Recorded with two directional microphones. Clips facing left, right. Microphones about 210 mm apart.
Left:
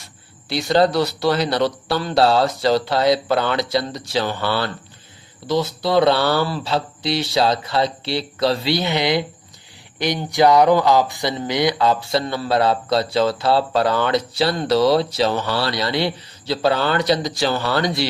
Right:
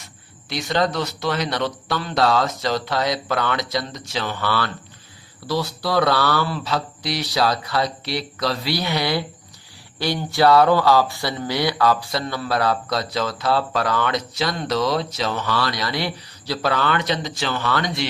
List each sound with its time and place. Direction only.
0.0 s speech: 30° left (ahead or behind)